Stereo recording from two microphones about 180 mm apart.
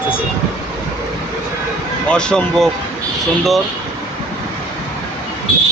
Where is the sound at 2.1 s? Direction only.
5° left (ahead or behind).